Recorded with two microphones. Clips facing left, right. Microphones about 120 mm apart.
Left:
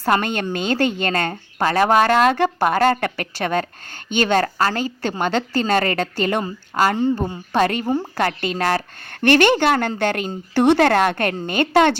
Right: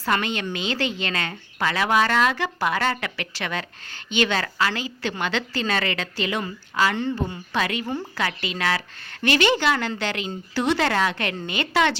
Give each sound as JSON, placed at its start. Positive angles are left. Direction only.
{"t": 0.0, "sound": "a woman's voice", "side_deg": 45}